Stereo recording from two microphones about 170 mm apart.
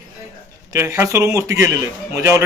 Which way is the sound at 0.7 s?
15° right (ahead or behind).